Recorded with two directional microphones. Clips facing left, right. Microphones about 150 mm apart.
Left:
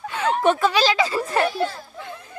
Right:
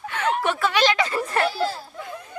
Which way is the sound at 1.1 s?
20° left (ahead or behind).